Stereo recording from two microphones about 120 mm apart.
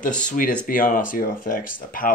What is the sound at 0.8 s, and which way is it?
Speech, 90° left.